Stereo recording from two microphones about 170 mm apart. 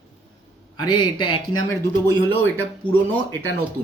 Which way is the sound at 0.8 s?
25° left (ahead or behind).